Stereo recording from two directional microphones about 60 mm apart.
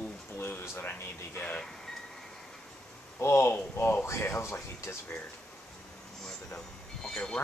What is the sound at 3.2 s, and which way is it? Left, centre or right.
Speech, left.